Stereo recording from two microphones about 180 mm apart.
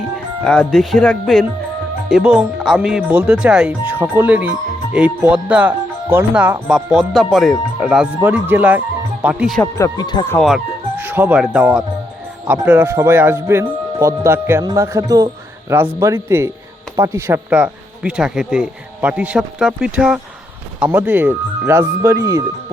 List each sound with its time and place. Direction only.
0.4 s speech: 5° left (ahead or behind)
9.7 s speech: 20° left (ahead or behind)
10.3 s speech: centre (ahead or behind)
10.9 s speech: 10° right (ahead or behind)